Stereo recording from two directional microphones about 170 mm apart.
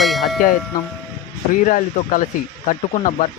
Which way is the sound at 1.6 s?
50° left (ahead or behind).